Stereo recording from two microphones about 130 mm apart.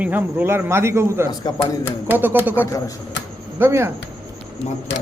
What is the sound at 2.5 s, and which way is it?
Speech, 20° left (ahead or behind).